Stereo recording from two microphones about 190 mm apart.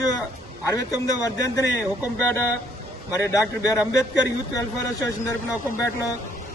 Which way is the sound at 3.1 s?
15° left (ahead or behind).